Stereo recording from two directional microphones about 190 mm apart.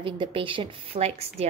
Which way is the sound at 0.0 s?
30° right (ahead or behind).